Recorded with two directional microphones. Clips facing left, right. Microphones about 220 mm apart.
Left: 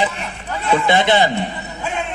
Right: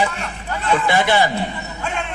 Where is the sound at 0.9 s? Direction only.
20° left (ahead or behind).